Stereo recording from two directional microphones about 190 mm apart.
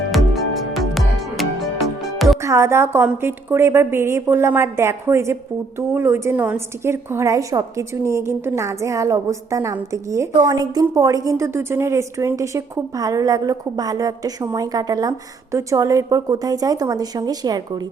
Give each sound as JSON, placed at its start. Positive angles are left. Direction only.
{"t": 0.7, "sound": "music", "side_deg": 0}
{"t": 2.4, "sound": "a woman's voice", "side_deg": -15}